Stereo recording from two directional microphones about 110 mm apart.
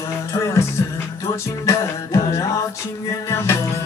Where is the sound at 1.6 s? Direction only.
25° left (ahead or behind).